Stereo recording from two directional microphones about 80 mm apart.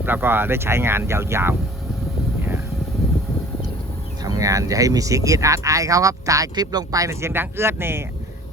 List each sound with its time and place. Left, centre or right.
0.0 s speech: right
4.2 s speech: right